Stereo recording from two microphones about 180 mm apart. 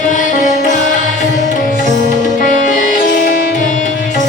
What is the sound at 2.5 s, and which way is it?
Sitar, 45° left (ahead or behind).